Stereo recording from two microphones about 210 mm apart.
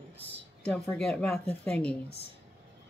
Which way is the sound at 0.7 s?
5° left (ahead or behind).